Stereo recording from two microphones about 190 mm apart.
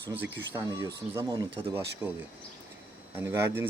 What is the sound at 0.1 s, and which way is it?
Speech, 10° right (ahead or behind).